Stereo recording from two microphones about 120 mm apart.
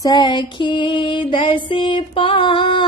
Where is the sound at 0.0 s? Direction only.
35° left (ahead or behind).